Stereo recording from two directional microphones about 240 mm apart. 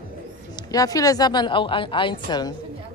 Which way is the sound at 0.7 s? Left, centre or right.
Centre.